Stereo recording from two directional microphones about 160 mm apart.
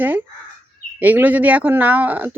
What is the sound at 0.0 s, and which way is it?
Speech, 10° right (ahead or behind).